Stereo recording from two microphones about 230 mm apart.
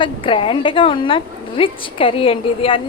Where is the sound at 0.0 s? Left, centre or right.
Left.